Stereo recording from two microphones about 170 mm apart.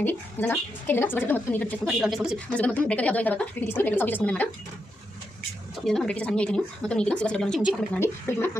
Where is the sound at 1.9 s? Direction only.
Centre (ahead or behind).